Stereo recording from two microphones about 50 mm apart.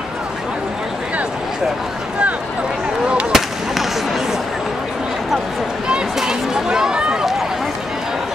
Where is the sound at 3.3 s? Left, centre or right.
Centre.